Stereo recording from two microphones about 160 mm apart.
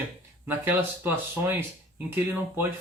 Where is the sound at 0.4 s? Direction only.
10° right (ahead or behind).